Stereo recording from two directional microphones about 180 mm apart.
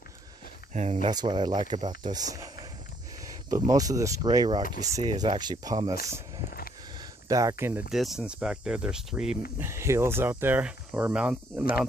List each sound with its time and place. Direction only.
0.7 s speech: 40° right (ahead or behind)
1.0 s speech: 25° right (ahead or behind)
6.5 s a sound: 55° left (ahead or behind)
6.9 s speech: 20° right (ahead or behind)